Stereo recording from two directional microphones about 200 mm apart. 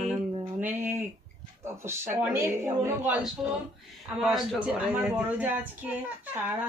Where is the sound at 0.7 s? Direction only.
10° right (ahead or behind).